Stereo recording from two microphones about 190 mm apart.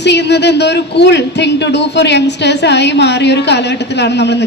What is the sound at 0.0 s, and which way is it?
A man's voice, 65° left (ahead or behind).